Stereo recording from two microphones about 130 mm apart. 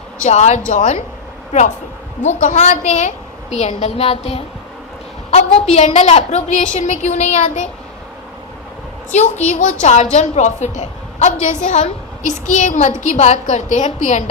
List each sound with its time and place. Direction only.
0.3 s a woman's voice: 60° left (ahead or behind)
2.4 s a woman's voice: 65° left (ahead or behind)
5.3 s a sound: 55° left (ahead or behind)
5.7 s a woman's voice: 60° left (ahead or behind)
9.1 s a woman's voice: 60° left (ahead or behind)
9.5 s a woman's voice: 80° left
9.8 s a woman's voice: 60° left (ahead or behind)